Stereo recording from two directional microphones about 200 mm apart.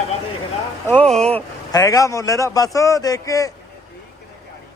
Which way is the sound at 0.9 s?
5° left (ahead or behind).